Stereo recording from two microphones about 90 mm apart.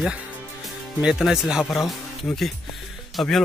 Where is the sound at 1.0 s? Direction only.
5° right (ahead or behind).